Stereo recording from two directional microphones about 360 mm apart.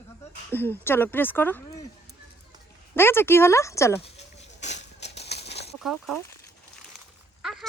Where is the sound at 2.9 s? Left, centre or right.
Centre; by 5.6 s left.